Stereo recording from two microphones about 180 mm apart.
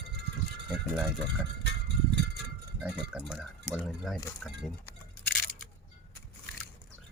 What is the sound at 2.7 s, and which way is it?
Speech, 5° right (ahead or behind).